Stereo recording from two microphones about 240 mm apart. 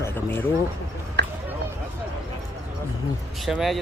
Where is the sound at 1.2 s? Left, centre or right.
Right.